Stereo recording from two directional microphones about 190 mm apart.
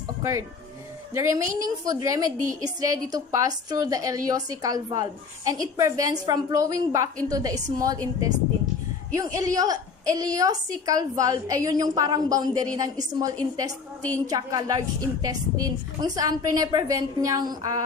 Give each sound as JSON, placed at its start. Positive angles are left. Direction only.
{"t": 0.0, "sound": "music", "side_deg": -15}
{"t": 1.1, "sound": "a woman's voice", "side_deg": -15}
{"t": 2.3, "sound": "a woman's voice", "side_deg": -40}
{"t": 2.8, "sound": "a woman's voice", "side_deg": -20}